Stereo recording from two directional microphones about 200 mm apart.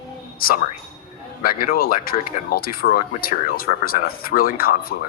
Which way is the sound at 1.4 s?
45° left (ahead or behind).